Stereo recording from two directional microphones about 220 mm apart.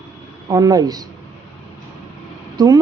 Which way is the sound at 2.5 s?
15° right (ahead or behind).